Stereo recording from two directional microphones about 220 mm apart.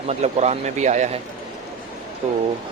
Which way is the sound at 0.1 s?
30° right (ahead or behind).